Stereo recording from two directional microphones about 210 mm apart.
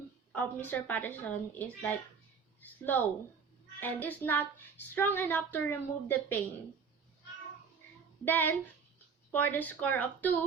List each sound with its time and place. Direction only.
0.3 s speech: 10° left (ahead or behind)
8.2 s speech: 10° left (ahead or behind)